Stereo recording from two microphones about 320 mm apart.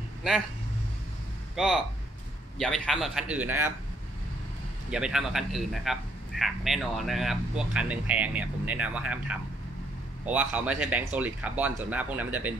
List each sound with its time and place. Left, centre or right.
1.5 s a man's voice: centre
4.9 s a man's voice: centre